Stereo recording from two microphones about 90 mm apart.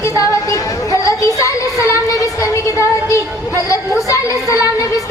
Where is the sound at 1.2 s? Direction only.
35° left (ahead or behind).